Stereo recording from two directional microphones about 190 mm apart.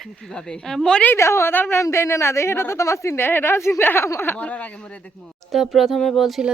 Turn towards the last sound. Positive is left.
turn(degrees=0)  # may be behind; listen again after turning